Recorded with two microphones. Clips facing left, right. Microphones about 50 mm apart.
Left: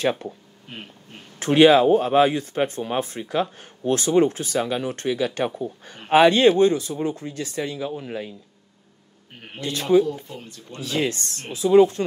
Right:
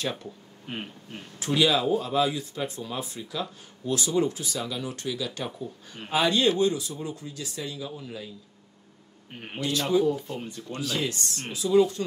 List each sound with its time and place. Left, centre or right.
0.0 s speech: left
0.7 s a sound: centre
1.4 s speech: left
9.6 s speech: left
10.3 s speech: centre
10.8 s speech: left